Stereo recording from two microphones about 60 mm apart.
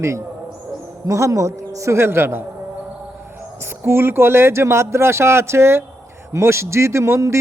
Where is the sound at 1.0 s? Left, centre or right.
Right.